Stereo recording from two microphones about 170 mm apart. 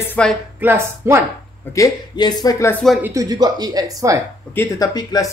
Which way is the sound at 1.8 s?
25° left (ahead or behind).